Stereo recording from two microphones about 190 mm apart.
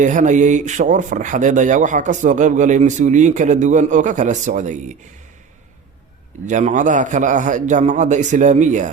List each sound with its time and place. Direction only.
0.0 s speech: 40° right (ahead or behind)
6.4 s speech: 40° right (ahead or behind)